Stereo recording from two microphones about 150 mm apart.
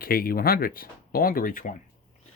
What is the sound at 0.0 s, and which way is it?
Speech, 80° left.